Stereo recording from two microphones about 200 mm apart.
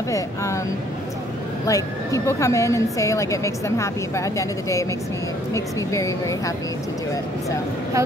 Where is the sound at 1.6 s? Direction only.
15° left (ahead or behind).